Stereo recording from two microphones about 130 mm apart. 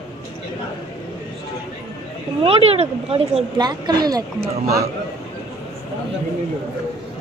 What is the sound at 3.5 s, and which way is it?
Speech, 35° right (ahead or behind).